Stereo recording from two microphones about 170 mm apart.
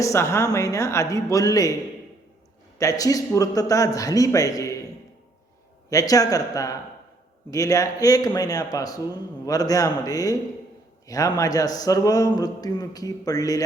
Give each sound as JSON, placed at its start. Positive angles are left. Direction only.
{"t": 0.0, "sound": "speech", "side_deg": 15}
{"t": 2.7, "sound": "speech", "side_deg": 20}
{"t": 5.9, "sound": "speech", "side_deg": 20}